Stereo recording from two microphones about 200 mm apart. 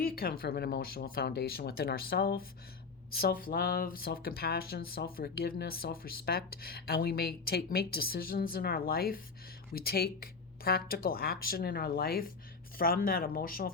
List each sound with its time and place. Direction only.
0.0 s speech: 45° left (ahead or behind)